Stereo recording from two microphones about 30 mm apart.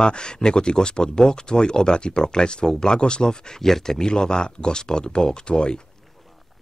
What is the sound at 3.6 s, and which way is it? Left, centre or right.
A man's voice, centre.